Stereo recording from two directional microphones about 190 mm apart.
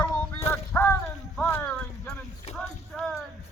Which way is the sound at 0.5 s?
10° left (ahead or behind).